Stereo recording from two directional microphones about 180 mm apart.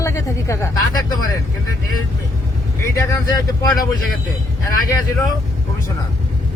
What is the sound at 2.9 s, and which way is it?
Speech, 20° left (ahead or behind).